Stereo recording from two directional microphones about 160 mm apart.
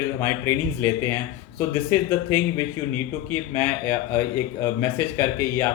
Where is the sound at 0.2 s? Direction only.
15° left (ahead or behind).